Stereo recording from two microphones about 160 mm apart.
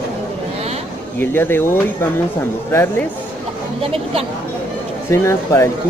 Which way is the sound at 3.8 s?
40° right (ahead or behind).